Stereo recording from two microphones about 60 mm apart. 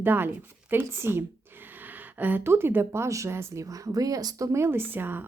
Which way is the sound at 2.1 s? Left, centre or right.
Right.